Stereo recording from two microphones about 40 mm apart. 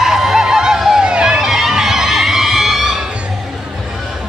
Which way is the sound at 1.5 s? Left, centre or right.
Centre.